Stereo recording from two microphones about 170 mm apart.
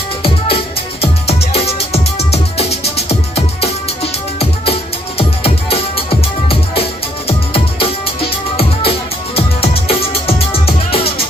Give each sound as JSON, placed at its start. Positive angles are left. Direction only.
{"t": 0.2, "sound": "music", "side_deg": 35}
{"t": 9.3, "sound": "music", "side_deg": 35}